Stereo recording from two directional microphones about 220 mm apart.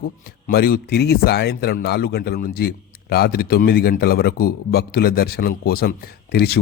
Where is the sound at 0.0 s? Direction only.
45° left (ahead or behind).